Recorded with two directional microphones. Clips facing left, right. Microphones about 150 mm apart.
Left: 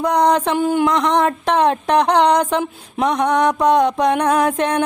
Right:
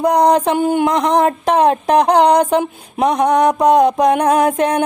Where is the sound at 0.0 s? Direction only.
35° right (ahead or behind).